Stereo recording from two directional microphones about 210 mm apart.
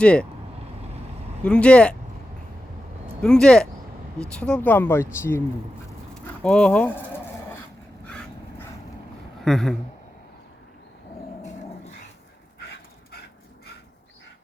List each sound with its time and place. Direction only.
0.0 s speech: 5° left (ahead or behind)
1.5 s speech: 5° left (ahead or behind)
3.2 s speech: 5° left (ahead or behind)
8.0 s dog: 5° left (ahead or behind)
9.4 s speech: centre (ahead or behind)